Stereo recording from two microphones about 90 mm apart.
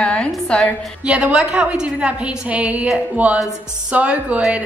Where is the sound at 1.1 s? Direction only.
10° right (ahead or behind).